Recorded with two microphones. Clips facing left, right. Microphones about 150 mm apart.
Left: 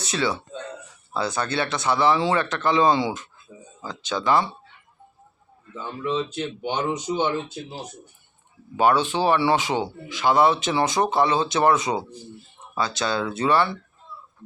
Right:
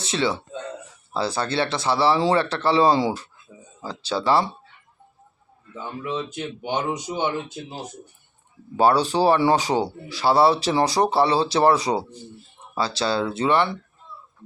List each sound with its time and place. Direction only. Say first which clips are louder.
0.0 s speech: right 1 dB; 25° right (ahead or behind)
5.7 s speech: left 2 dB; 10° right (ahead or behind)
8.7 s speech: right 2 dB; 35° right (ahead or behind)